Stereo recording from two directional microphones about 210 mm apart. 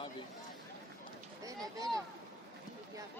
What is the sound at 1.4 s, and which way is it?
Speech, 15° right (ahead or behind).